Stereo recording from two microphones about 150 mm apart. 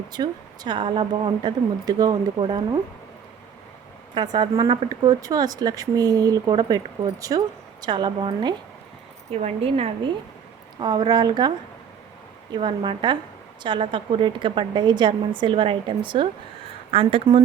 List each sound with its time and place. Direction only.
0.1 s a woman's voice: 30° right (ahead or behind)
4.1 s speech: 30° right (ahead or behind)
9.3 s a woman's voice: 45° right (ahead or behind)
10.8 s a woman's voice: 30° right (ahead or behind)